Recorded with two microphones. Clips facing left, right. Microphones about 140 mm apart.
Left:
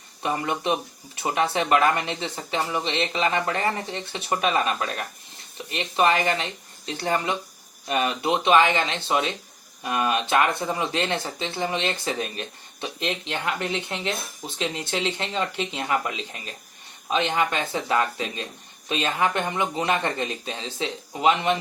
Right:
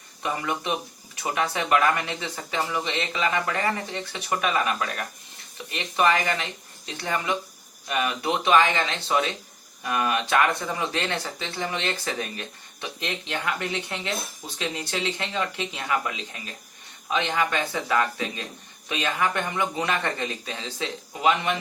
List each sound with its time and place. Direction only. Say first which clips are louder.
0.2 s speech: left 2 dB; 25° left (ahead or behind)